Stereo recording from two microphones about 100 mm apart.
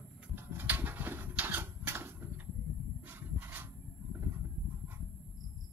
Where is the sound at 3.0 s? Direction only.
20° right (ahead or behind).